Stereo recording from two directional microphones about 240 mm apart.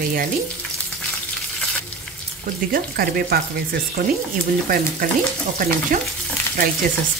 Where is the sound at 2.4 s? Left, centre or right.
Right.